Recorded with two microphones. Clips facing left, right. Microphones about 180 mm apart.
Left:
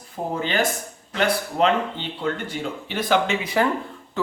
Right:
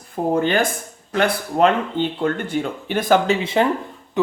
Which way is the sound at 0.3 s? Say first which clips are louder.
Right 3 dB; 50° right (ahead or behind).